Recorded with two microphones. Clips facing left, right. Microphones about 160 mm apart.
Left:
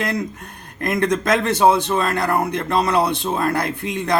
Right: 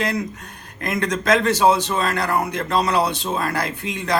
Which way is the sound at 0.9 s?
55° left (ahead or behind).